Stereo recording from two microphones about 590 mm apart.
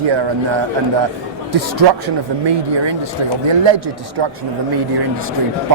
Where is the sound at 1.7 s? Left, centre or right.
Right.